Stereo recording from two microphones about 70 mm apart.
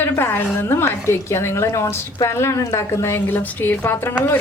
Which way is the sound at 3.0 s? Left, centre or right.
Left.